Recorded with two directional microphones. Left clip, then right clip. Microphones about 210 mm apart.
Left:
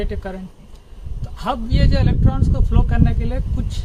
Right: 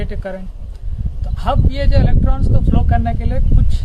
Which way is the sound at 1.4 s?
15° right (ahead or behind).